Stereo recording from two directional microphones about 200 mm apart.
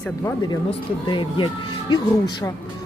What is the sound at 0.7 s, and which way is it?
Speech, 25° left (ahead or behind).